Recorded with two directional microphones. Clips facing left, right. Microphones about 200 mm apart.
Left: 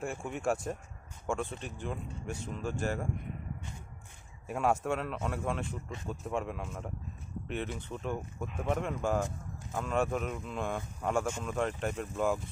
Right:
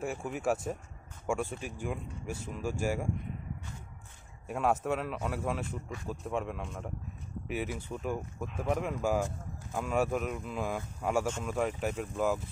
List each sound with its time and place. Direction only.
0.0 s speech: 5° right (ahead or behind)
4.5 s speech: centre (ahead or behind)